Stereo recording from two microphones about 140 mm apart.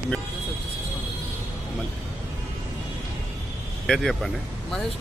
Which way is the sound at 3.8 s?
5° left (ahead or behind).